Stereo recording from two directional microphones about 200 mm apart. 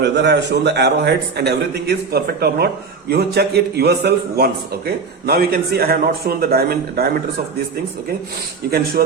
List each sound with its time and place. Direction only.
0.0 s a man's voice: 60° right (ahead or behind)
9.0 s a man's voice: 45° right (ahead or behind)